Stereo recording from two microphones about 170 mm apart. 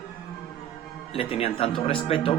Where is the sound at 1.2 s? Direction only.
35° left (ahead or behind).